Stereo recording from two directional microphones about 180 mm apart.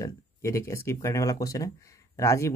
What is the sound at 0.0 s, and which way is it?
Speech, 15° left (ahead or behind).